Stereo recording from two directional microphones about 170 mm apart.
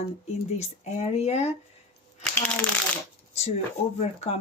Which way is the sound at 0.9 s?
40° left (ahead or behind).